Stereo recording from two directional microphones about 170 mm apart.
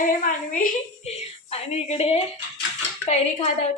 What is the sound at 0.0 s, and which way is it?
A woman's voice, 50° left (ahead or behind).